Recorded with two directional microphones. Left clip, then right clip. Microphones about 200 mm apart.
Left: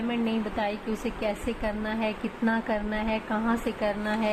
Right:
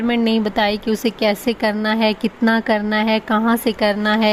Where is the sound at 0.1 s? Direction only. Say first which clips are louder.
Right 13 dB; 60° right (ahead or behind).